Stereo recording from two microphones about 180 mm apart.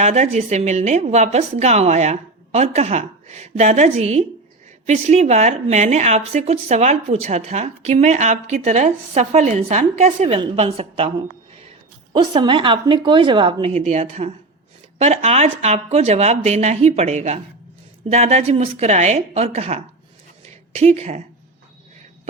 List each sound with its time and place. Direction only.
0.0 s a woman's voice: 40° right (ahead or behind)
12.1 s a woman's voice: 25° right (ahead or behind)
20.4 s a sound: 35° right (ahead or behind)